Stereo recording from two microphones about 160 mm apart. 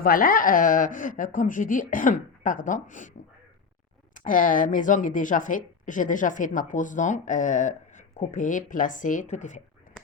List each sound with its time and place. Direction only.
0.0 s speech: 60° left (ahead or behind)
4.1 s speech: 55° left (ahead or behind)